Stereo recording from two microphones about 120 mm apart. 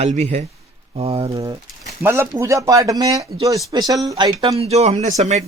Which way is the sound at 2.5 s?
30° right (ahead or behind).